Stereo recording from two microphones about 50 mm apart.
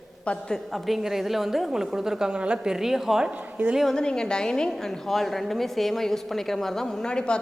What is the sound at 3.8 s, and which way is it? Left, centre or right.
A woman's voice, centre.